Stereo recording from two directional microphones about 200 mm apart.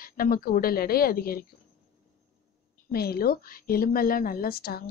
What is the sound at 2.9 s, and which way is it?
A woman's voice, 50° left (ahead or behind).